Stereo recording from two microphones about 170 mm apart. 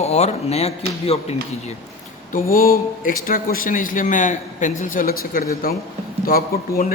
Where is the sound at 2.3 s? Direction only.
55° left (ahead or behind).